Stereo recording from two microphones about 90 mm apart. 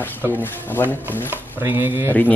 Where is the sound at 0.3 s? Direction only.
20° left (ahead or behind).